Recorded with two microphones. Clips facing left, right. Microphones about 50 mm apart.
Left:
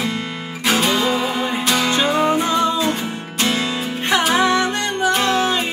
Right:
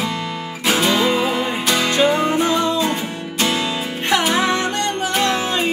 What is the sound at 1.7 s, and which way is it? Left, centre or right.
Music, centre.